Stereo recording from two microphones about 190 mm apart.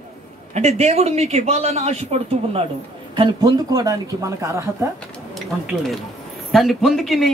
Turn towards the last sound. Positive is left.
turn(degrees=0)  # may be behind; listen again after turning